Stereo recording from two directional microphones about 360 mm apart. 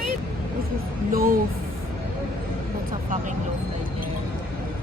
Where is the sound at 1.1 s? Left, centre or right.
Right.